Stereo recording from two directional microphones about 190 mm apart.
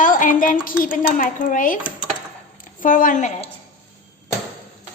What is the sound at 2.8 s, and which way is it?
Speech, 45° left (ahead or behind).